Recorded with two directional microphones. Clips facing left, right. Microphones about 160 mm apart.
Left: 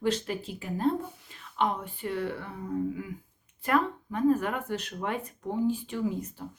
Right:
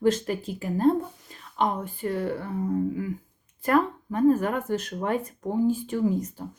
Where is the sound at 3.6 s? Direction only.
40° right (ahead or behind).